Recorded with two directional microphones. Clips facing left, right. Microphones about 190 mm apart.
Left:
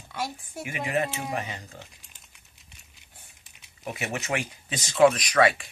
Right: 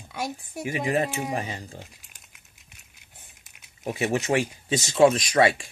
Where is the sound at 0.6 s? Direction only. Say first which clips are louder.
Right 3 dB; 35° right (ahead or behind).